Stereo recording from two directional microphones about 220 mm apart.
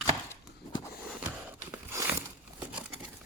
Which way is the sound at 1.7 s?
15° right (ahead or behind).